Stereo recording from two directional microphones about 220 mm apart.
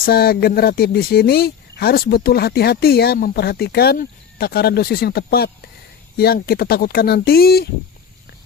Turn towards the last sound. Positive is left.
turn(degrees=45)  # may be behind; listen again after turning